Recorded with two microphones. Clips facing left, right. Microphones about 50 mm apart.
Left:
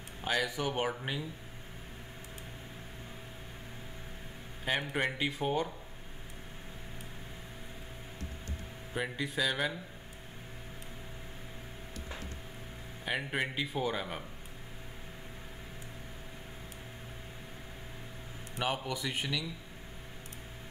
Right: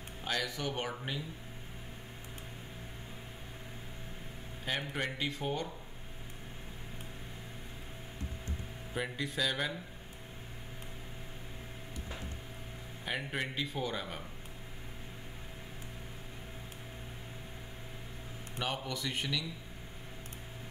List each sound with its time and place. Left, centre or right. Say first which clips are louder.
0.2 s a man's voice: left 4 dB; centre
4.6 s a man's voice: left 4 dB; centre
8.9 s a man's voice: left 2 dB; centre
13.0 s a man's voice: left 3 dB; centre
18.6 s a man's voice: left 3 dB; centre